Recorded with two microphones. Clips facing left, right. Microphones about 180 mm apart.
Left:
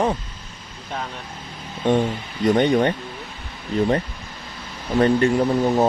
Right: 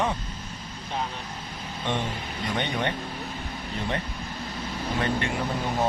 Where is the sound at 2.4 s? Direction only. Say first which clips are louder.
Left 12 dB; 45° left (ahead or behind).